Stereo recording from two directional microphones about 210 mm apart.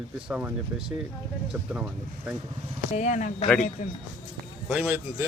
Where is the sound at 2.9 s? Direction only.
35° left (ahead or behind).